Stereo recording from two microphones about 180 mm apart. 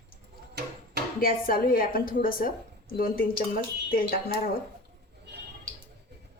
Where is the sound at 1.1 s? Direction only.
50° left (ahead or behind).